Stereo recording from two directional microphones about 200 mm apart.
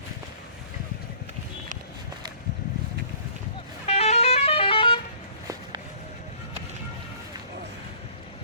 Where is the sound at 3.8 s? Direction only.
30° left (ahead or behind).